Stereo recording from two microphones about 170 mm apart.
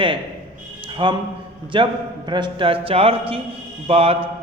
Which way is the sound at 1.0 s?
30° right (ahead or behind).